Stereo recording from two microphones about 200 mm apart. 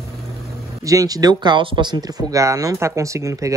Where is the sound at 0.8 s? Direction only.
15° right (ahead or behind).